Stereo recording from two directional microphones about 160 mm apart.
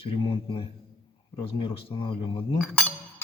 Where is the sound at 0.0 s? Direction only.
35° left (ahead or behind).